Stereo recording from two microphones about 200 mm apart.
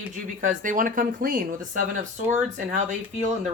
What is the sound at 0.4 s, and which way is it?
Speech, 40° right (ahead or behind).